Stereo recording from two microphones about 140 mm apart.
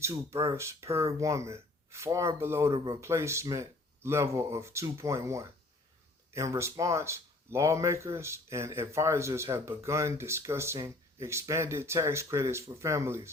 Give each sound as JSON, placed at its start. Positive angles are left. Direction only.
{"t": 0.0, "sound": "speech", "side_deg": -20}
{"t": 2.7, "sound": "speech", "side_deg": -35}
{"t": 3.0, "sound": "speech", "side_deg": -20}